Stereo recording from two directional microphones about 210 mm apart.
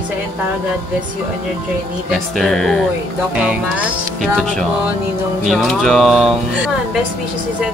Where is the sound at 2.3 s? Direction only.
Centre (ahead or behind).